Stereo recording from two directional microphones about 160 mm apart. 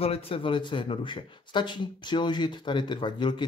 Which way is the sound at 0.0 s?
40° left (ahead or behind).